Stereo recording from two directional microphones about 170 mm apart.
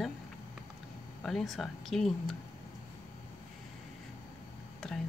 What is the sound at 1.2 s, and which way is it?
Speech, centre (ahead or behind).